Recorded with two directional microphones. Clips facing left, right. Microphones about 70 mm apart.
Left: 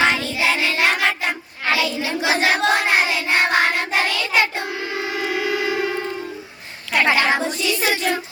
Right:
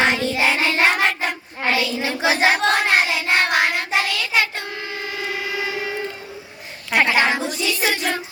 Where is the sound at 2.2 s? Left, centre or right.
Right.